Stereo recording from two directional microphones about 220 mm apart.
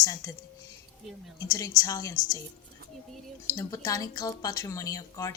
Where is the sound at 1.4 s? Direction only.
15° left (ahead or behind).